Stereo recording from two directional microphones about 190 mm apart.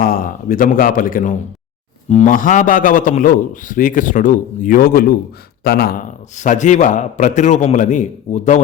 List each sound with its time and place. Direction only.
0.0 s a man's voice: 50° left (ahead or behind)